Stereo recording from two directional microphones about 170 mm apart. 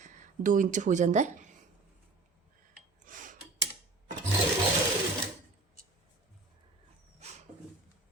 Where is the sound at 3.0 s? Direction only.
50° right (ahead or behind).